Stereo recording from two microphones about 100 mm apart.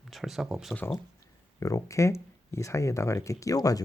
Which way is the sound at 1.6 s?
30° left (ahead or behind).